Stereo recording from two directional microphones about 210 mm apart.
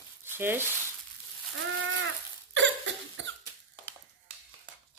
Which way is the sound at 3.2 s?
60° right (ahead or behind).